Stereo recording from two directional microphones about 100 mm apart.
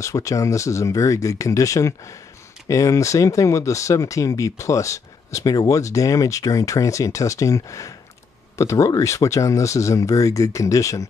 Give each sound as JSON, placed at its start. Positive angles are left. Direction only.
{"t": 0.0, "sound": "speech", "side_deg": 30}